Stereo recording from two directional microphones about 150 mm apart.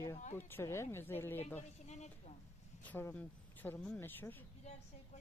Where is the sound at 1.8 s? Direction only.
50° left (ahead or behind).